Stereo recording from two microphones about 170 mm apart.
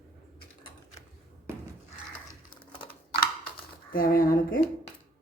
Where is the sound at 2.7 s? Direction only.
30° left (ahead or behind).